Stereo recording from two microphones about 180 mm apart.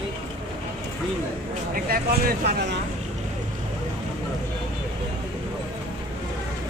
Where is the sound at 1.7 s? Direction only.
55° right (ahead or behind).